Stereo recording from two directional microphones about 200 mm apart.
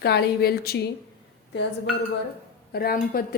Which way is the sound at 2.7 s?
50° left (ahead or behind).